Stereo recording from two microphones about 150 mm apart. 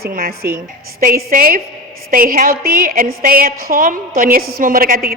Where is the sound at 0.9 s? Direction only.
75° right (ahead or behind).